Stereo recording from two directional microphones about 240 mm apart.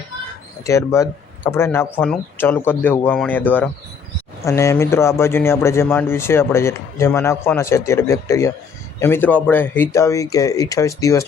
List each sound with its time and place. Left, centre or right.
0.6 s speech: centre